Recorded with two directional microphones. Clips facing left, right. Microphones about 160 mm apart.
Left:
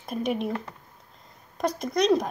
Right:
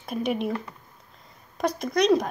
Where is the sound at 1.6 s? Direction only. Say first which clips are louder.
Right 1 dB; centre (ahead or behind).